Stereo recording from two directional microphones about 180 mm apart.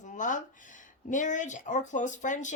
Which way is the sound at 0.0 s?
45° left (ahead or behind).